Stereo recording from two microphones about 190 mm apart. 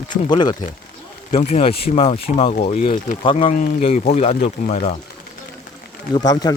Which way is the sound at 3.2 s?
25° left (ahead or behind).